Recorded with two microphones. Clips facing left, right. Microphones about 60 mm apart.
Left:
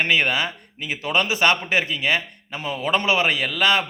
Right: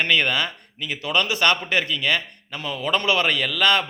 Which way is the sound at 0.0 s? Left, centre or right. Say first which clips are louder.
Left 1 dB; centre.